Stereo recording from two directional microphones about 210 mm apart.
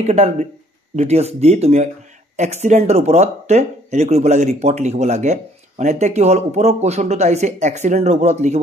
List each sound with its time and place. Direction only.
0.0 s speech: 30° right (ahead or behind)